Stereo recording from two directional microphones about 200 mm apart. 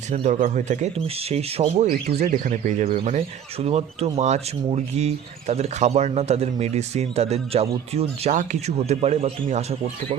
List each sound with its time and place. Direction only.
0.1 s speech: 35° right (ahead or behind)